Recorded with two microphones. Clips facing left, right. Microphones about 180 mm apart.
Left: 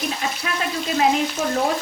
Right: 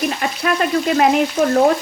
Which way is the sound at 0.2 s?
60° right (ahead or behind).